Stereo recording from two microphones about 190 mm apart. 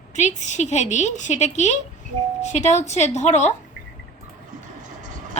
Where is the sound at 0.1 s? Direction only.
40° left (ahead or behind).